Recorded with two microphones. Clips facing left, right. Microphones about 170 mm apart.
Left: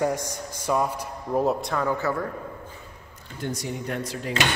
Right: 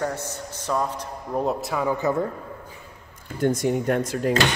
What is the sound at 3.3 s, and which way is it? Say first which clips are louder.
Speech: right 9 dB; 50° right (ahead or behind).